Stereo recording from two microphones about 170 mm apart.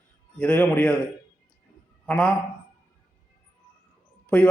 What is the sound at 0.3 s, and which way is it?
Speech, 5° left (ahead or behind).